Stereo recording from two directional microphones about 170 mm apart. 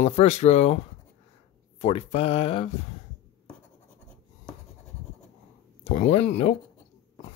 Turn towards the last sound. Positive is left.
turn(degrees=40)  # may be behind; listen again after turning